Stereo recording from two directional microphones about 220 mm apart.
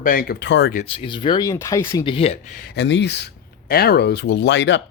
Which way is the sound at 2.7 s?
55° left (ahead or behind).